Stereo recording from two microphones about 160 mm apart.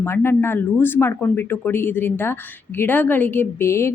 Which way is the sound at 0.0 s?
15° left (ahead or behind).